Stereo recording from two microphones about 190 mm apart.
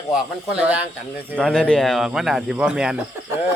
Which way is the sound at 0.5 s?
5° right (ahead or behind).